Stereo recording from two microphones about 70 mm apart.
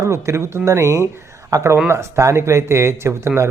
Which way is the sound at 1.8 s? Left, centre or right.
Right.